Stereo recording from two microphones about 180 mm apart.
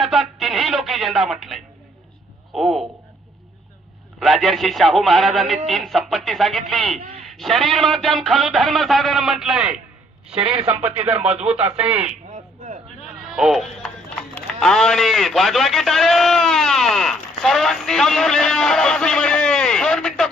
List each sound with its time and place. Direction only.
0.0 s radio: centre (ahead or behind)
2.5 s speech: centre (ahead or behind)
4.2 s speech: centre (ahead or behind)
11.0 s speech: 5° right (ahead or behind)
12.3 s a sound: 40° right (ahead or behind)
13.2 s sheep: centre (ahead or behind)
14.3 s a man's voice: 5° left (ahead or behind)